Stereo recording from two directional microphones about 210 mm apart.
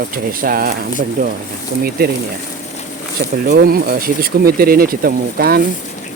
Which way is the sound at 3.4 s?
45° right (ahead or behind).